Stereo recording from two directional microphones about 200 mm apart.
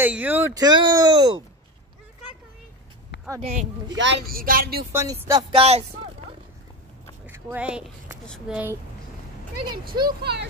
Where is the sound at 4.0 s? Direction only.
55° right (ahead or behind).